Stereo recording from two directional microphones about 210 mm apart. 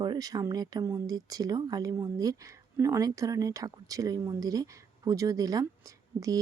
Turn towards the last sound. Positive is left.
turn(degrees=-15)  # may be behind; listen again after turning